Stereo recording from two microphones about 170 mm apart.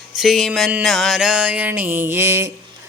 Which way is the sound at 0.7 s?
5° right (ahead or behind).